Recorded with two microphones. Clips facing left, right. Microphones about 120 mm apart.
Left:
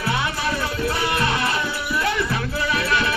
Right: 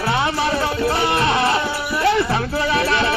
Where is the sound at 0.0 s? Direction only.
25° right (ahead or behind).